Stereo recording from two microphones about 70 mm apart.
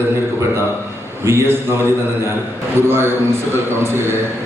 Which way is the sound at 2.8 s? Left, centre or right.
Right.